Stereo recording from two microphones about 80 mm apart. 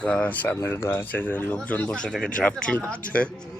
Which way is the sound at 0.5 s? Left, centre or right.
Left.